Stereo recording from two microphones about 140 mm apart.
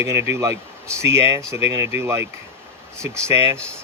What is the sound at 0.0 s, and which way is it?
Speech, 20° right (ahead or behind).